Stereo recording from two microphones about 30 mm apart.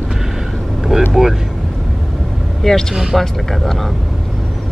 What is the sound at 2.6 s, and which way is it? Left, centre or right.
Speech, centre.